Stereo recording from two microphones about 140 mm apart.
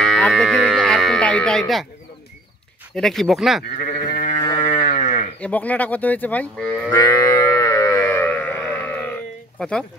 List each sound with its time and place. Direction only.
0.0 s speech: 5° left (ahead or behind)
2.9 s speech: 5° left (ahead or behind)
3.8 s sheep: 70° left (ahead or behind)
4.5 s a sound: 40° left (ahead or behind)
4.8 s sheep: 60° left (ahead or behind)
5.4 s speech: 10° left (ahead or behind)
7.2 s sheep: 20° left (ahead or behind)
9.6 s speech: 5° left (ahead or behind)